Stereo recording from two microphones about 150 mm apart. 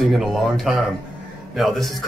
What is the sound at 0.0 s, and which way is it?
Speech, centre (ahead or behind).